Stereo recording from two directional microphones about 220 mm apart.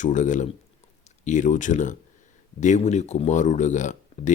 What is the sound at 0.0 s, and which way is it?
Speech, 35° left (ahead or behind).